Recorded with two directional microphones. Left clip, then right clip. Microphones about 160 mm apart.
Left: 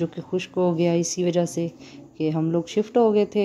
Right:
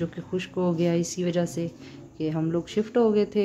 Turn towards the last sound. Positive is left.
turn(degrees=25)  # may be behind; listen again after turning